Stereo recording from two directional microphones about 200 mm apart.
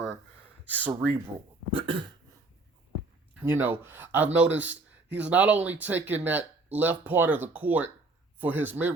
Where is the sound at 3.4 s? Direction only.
10° right (ahead or behind).